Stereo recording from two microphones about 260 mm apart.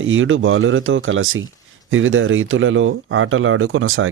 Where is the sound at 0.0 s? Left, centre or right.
Right.